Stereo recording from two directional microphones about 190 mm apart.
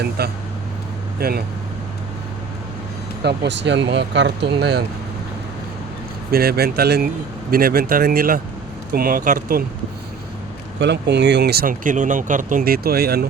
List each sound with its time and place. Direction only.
0.2 s speech: 55° right (ahead or behind)
3.2 s speech: 65° right (ahead or behind)
6.3 s speech: 55° right (ahead or behind)
10.8 s speech: 60° right (ahead or behind)